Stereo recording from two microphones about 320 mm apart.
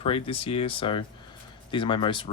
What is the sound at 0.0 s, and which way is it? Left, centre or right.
Speech, centre.